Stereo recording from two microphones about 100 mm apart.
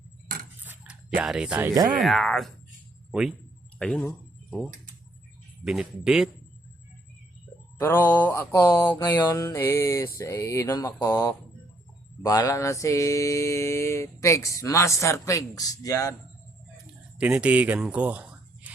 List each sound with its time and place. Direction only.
0.6 s a sound: 20° right (ahead or behind)
1.1 s speech: 5° right (ahead or behind)
2.0 s a man's voice: centre (ahead or behind)
3.8 s speech: 10° left (ahead or behind)
5.6 s speech: 5° right (ahead or behind)
7.8 s mantra: 20° left (ahead or behind)
9.2 s mantra: 30° left (ahead or behind)
17.2 s speech: 10° right (ahead or behind)
17.9 s music: 15° right (ahead or behind)